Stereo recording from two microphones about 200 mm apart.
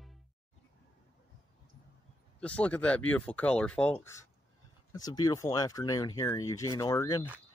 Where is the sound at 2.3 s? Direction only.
5° left (ahead or behind).